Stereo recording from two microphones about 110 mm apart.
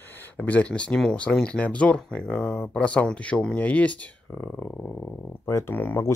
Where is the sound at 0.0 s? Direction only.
15° left (ahead or behind).